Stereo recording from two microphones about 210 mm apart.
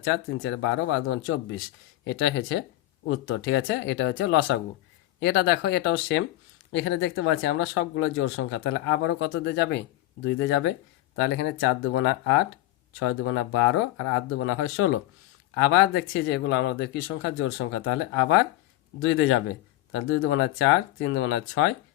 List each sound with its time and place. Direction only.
0.1 s speech: 65° left (ahead or behind)
15.6 s speech: 60° left (ahead or behind)